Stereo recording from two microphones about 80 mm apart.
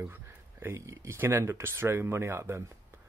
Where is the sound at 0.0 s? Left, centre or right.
Right.